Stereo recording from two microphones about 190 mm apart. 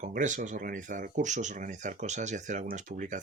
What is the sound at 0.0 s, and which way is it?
Speech, 40° right (ahead or behind).